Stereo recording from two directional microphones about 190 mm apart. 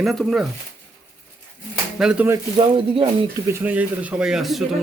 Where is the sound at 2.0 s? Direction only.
5° right (ahead or behind).